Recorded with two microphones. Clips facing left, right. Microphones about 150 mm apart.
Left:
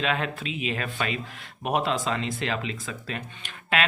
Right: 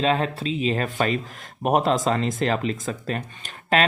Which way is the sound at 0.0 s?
35° right (ahead or behind).